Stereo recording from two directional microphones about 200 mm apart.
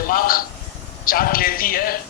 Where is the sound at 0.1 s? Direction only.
45° left (ahead or behind).